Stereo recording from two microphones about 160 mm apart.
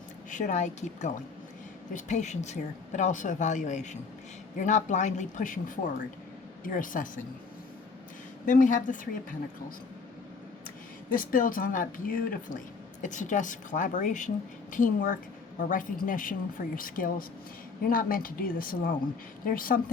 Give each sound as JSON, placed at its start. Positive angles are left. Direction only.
{"t": 0.3, "sound": "speech", "side_deg": 50}
{"t": 8.4, "sound": "speech", "side_deg": 55}
{"t": 11.1, "sound": "speech", "side_deg": 60}